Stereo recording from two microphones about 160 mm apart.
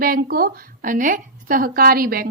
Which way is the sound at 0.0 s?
70° right (ahead or behind).